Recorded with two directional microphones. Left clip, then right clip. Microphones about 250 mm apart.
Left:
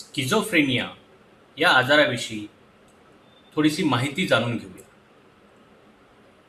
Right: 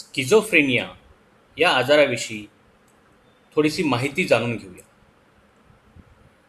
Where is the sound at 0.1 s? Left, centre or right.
Centre.